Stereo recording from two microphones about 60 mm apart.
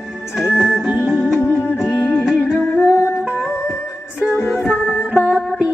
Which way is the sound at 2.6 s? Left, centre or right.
Left.